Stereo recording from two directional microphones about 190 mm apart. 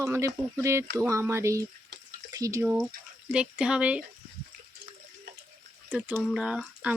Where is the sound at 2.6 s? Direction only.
5° right (ahead or behind).